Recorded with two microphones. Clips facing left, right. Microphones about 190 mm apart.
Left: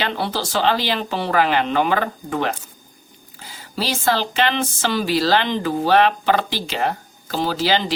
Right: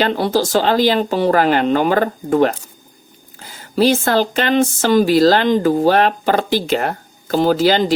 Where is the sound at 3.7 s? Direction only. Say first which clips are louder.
Right 7 dB; 50° right (ahead or behind).